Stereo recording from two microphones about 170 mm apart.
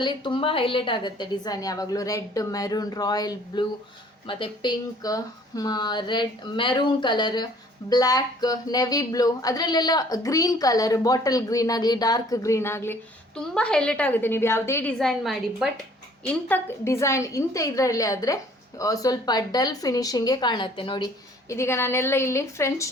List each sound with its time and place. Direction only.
0.0 s speech: 25° left (ahead or behind); by 15.7 s centre (ahead or behind)
16.2 s speech: 10° left (ahead or behind); by 21.1 s 30° left (ahead or behind)
21.5 s a woman's voice: 15° left (ahead or behind)